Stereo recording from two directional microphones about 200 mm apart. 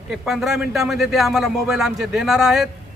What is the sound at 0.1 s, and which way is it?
Speech, centre (ahead or behind).